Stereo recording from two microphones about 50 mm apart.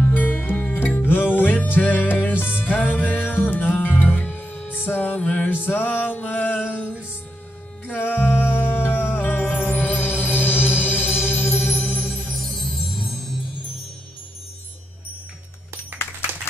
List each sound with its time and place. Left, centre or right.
0.0 s music: left
5.5 s music: left
7.8 s music: left
11.8 s music: left
12.1 s music: centre
15.9 s a sound: right